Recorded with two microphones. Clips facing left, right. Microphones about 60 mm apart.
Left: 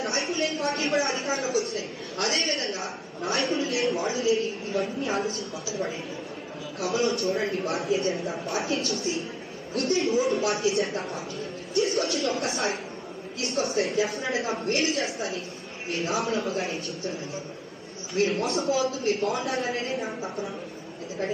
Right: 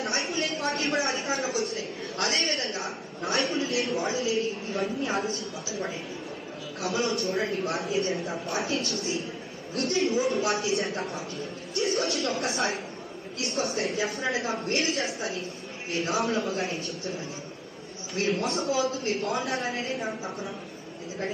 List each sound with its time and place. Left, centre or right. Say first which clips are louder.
0.0 s a woman's voice: left 2 dB; centre
18.1 s speech: left 2 dB; centre